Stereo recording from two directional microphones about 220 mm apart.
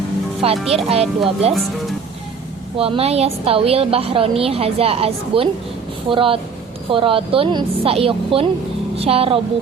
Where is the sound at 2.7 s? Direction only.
25° right (ahead or behind).